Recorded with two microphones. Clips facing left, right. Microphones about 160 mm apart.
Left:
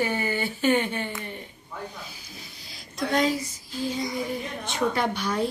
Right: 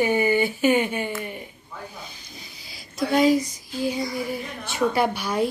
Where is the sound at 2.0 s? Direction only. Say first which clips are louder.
Right 1 dB; 5° left (ahead or behind); by 3.9 s 15° right (ahead or behind).